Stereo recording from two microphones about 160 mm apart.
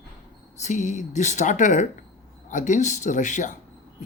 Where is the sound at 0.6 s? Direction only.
50° left (ahead or behind).